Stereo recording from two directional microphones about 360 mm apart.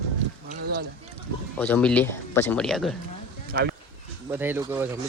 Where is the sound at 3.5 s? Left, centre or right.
Right.